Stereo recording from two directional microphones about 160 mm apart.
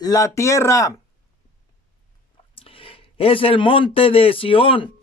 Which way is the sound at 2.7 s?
35° left (ahead or behind).